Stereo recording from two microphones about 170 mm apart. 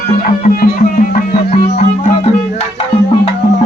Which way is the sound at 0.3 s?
60° left (ahead or behind).